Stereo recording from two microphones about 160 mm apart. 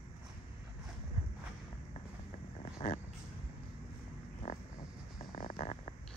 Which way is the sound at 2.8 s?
40° left (ahead or behind).